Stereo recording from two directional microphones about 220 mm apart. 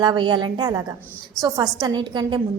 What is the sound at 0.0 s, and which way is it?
A woman's voice, 20° right (ahead or behind).